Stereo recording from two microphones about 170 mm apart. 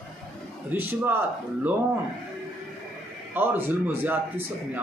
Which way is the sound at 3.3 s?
10° right (ahead or behind).